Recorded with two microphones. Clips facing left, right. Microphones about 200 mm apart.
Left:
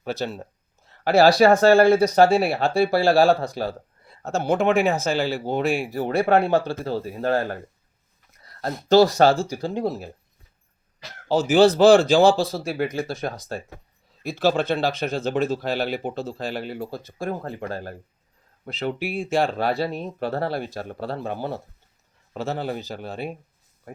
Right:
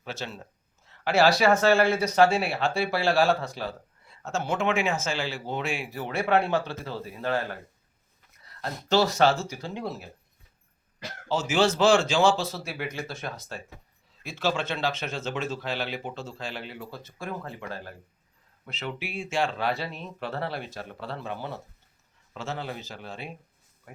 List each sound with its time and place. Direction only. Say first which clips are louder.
0.0 s speech: left 9 dB; 35° left (ahead or behind)
11.3 s speech: left 8 dB; 35° left (ahead or behind)